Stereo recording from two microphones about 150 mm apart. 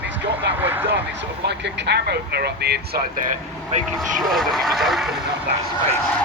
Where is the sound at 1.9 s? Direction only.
90° right.